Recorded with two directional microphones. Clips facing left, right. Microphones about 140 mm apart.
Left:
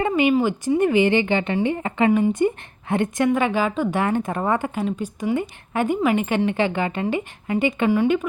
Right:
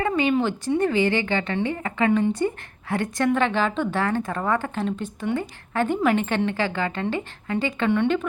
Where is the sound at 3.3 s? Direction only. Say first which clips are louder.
Right 2 dB; 10° left (ahead or behind).